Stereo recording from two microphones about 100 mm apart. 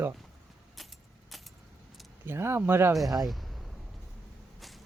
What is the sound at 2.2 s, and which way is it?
Speech, 25° right (ahead or behind).